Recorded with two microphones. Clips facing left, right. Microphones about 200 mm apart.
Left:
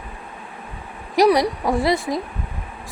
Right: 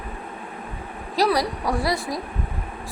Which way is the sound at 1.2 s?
20° left (ahead or behind).